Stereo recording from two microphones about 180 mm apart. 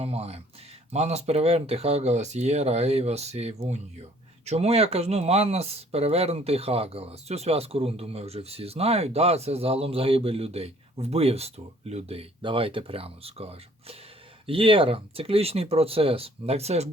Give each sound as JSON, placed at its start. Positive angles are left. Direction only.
{"t": 0.0, "sound": "speech", "side_deg": -35}